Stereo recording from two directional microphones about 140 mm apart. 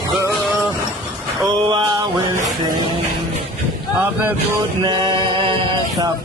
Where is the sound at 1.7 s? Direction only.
30° right (ahead or behind).